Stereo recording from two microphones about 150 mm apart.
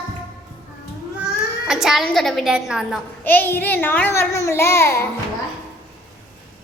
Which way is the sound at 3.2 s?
15° left (ahead or behind).